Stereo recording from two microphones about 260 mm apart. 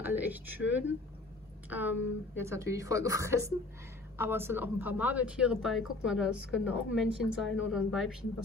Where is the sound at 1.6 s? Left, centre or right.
Centre.